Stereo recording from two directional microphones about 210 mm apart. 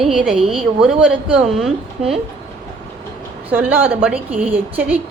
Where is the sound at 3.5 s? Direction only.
10° right (ahead or behind).